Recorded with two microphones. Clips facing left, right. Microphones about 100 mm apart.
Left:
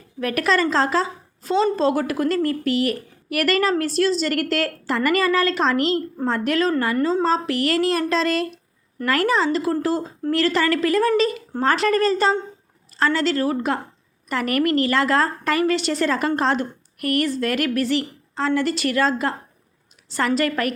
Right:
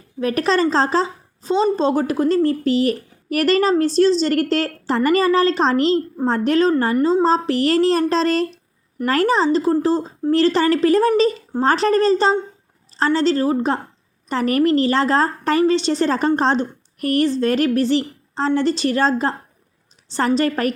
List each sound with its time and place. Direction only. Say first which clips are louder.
0.2 s a woman's voice: right 3 dB; 30° right (ahead or behind)